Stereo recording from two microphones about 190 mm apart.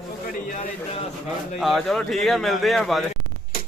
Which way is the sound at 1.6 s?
Centre (ahead or behind).